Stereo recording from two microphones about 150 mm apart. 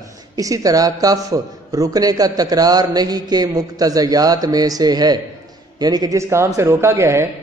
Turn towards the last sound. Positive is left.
turn(degrees=-20)  # may be behind; listen again after turning